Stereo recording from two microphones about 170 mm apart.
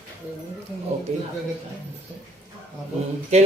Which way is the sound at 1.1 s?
45° right (ahead or behind).